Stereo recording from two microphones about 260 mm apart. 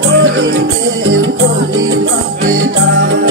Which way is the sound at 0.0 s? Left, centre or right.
Right.